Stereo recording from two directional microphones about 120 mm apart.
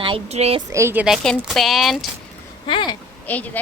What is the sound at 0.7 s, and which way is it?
Speech, 20° right (ahead or behind).